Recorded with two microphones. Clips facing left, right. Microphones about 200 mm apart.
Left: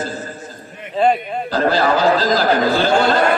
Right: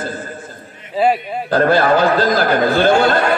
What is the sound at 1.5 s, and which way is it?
A man's voice, 55° right (ahead or behind).